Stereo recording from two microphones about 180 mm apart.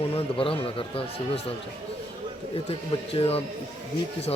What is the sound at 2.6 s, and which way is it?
Speech, 30° left (ahead or behind).